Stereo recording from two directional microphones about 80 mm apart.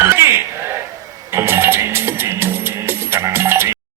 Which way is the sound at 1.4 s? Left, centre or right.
Right.